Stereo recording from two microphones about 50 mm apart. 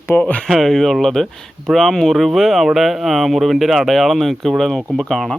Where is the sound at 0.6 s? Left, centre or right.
Centre.